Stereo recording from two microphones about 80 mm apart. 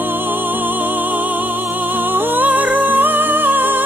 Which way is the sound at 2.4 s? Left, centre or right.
Right.